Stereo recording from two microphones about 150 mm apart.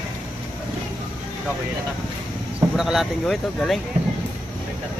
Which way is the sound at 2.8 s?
Centre (ahead or behind).